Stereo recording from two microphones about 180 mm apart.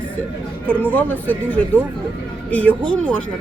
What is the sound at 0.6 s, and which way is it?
Speech, 10° left (ahead or behind).